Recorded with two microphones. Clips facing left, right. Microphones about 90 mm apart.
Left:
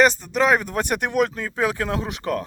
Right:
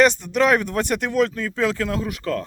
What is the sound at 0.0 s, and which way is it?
Speech, centre (ahead or behind).